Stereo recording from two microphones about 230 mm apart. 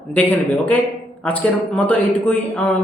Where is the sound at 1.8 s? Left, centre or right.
Centre.